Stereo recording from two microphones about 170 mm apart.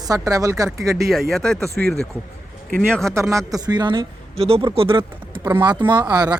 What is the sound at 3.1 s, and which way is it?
Speech, 20° right (ahead or behind).